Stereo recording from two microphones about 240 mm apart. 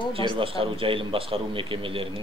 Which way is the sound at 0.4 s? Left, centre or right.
Right.